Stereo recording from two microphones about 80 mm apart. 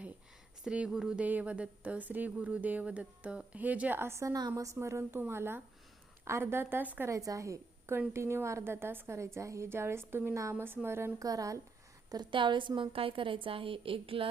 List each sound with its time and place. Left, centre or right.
0.6 s a woman's voice: centre; by 4.4 s right
4.4 s a woman's voice: right
7.1 s a woman's voice: right
11.2 s a woman's voice: right
12.1 s a woman's voice: right